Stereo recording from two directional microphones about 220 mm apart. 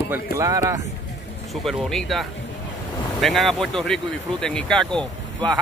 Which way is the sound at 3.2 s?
Centre (ahead or behind).